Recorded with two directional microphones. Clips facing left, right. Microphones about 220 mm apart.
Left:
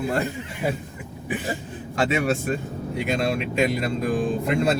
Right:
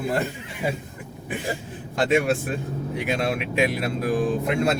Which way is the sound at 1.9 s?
Centre (ahead or behind).